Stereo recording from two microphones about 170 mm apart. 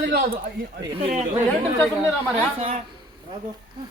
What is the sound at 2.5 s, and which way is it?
Speech, 50° right (ahead or behind).